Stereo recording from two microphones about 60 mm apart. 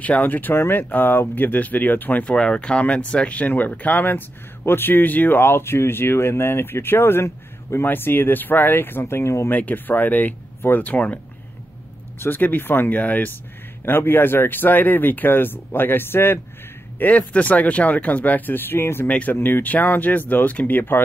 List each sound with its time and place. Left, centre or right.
0.0 s speech: left
2.3 s speech: centre; by 9.5 s left
9.5 s speech: left
12.2 s speech: left
17.0 s speech: left
19.0 s speech: left
19.3 s speech: left